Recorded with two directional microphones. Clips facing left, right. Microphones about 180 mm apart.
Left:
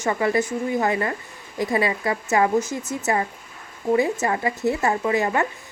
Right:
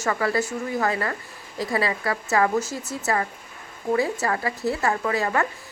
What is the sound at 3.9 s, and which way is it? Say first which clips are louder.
A woman's voice: left 3 dB; 20° left (ahead or behind).